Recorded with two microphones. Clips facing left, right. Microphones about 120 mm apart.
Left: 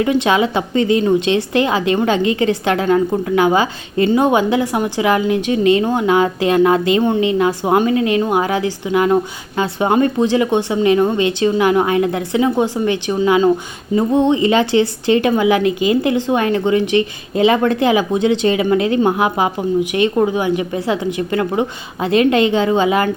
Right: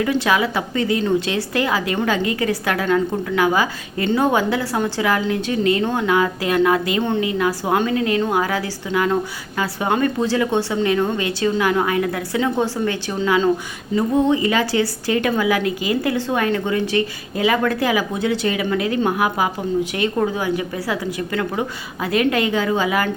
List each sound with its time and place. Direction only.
0.0 s a woman's voice: 20° left (ahead or behind)